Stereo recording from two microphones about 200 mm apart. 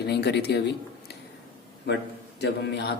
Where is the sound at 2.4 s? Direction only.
55° left (ahead or behind).